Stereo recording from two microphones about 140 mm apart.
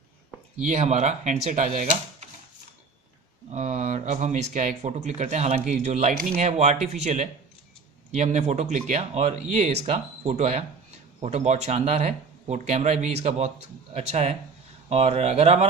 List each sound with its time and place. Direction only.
0.7 s speech: 55° right (ahead or behind)
3.5 s speech: 55° right (ahead or behind)